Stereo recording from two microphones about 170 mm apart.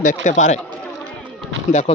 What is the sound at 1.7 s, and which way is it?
Speech, 45° left (ahead or behind).